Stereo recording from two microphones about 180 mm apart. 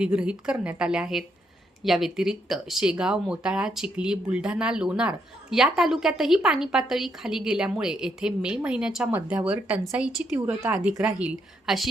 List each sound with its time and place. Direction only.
0.0 s speech: 5° right (ahead or behind)